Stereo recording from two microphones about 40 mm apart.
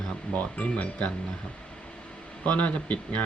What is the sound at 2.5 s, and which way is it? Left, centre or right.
Speech, left.